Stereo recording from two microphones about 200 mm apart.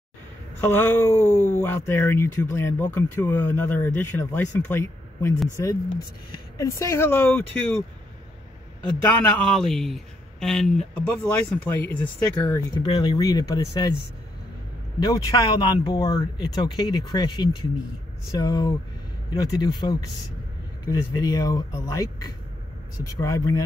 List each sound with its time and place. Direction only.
0.6 s speech: 10° left (ahead or behind)
1.2 s speech: 35° left (ahead or behind)
1.6 s speech: 10° left (ahead or behind)
9.0 s speech: 5° left (ahead or behind)
12.8 s speech: 20° left (ahead or behind)
15.0 s speech: 20° left (ahead or behind)